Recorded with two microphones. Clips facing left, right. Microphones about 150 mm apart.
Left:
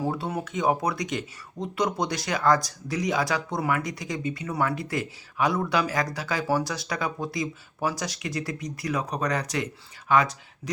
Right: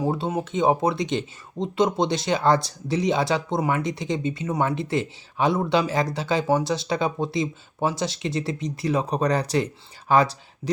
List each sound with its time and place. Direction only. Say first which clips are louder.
0.0 s speech: right 4 dB; 20° right (ahead or behind)